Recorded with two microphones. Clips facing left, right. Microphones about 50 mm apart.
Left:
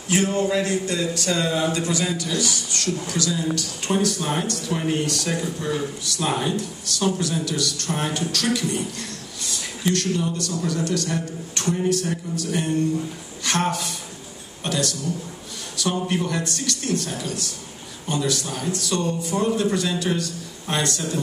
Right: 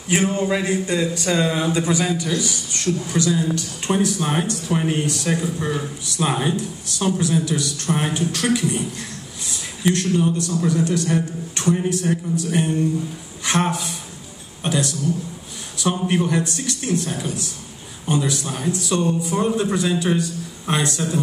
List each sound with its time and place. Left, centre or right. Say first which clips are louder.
0.1 s a man's voice: right 1 dB; right
16.1 s a man's voice: right 4 dB; centre